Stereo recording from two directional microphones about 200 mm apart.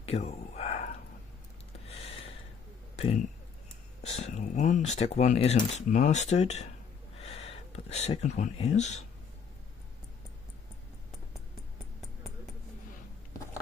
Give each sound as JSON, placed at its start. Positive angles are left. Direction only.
{"t": 0.0, "sound": "a sound", "side_deg": 30}
{"t": 1.9, "sound": "gasp", "side_deg": 30}
{"t": 3.0, "sound": "speech", "side_deg": 30}